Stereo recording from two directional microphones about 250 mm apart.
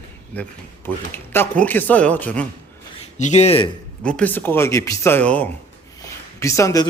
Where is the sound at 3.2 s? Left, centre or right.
Left.